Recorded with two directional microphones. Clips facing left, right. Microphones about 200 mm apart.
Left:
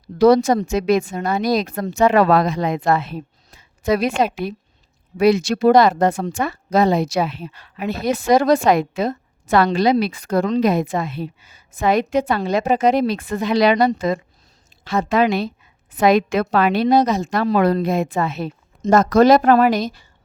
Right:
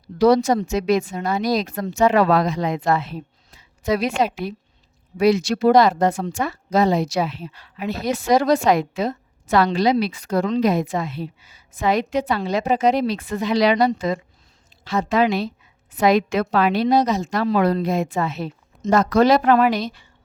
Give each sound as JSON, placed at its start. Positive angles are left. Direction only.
{"t": 0.2, "sound": "a woman's voice", "side_deg": 50}